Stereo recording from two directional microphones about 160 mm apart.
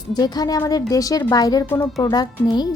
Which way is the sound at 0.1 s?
25° left (ahead or behind).